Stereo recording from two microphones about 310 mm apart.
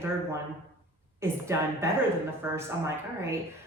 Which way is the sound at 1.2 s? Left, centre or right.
Centre.